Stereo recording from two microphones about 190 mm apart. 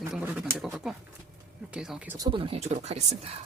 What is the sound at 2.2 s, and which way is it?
Speech, 25° right (ahead or behind).